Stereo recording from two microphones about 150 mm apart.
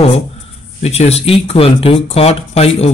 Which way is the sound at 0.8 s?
45° left (ahead or behind).